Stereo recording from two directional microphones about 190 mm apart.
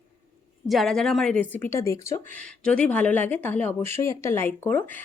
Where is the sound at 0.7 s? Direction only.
Centre (ahead or behind).